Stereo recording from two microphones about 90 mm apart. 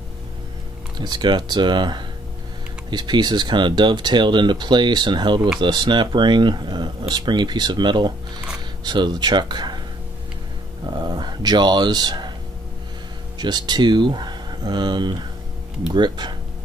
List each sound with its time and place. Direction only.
0.9 s speech: 55° right (ahead or behind)
10.9 s speech: 55° right (ahead or behind)
13.4 s speech: 55° right (ahead or behind)